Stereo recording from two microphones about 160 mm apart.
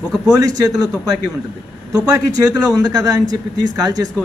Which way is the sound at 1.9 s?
25° right (ahead or behind).